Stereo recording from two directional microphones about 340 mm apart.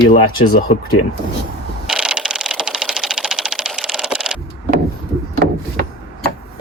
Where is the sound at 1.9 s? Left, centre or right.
Centre.